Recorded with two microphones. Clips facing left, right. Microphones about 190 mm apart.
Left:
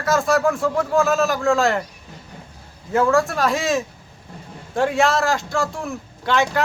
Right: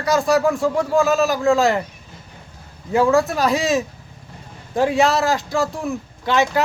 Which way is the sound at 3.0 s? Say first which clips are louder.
Right 2 dB; 20° right (ahead or behind).